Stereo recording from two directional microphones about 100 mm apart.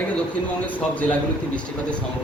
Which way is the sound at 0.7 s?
15° left (ahead or behind).